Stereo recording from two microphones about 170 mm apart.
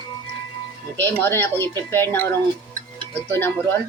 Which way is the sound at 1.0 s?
10° left (ahead or behind).